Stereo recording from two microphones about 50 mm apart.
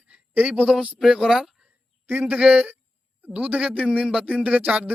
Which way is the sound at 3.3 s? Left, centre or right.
Right.